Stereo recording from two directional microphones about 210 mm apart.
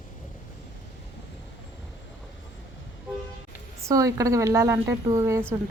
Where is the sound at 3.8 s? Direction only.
15° right (ahead or behind).